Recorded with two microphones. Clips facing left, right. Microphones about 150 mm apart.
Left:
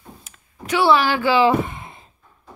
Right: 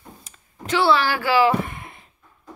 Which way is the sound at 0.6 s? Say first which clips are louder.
Left 2 dB; 15° left (ahead or behind).